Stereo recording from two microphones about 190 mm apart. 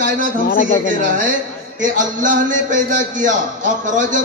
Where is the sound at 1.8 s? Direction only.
45° right (ahead or behind).